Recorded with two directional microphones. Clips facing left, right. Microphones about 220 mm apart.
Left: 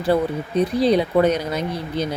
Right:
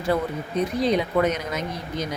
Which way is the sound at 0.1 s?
35° left (ahead or behind).